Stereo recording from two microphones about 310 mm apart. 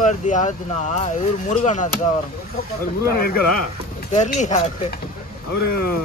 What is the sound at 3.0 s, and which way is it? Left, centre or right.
Speech, left.